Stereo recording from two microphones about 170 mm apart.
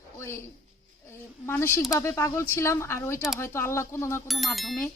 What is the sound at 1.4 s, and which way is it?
A woman's voice, 15° left (ahead or behind).